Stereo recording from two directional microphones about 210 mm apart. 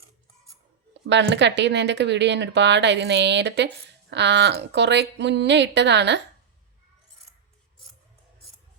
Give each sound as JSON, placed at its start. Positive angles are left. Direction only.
{"t": 1.0, "sound": "speech", "side_deg": -55}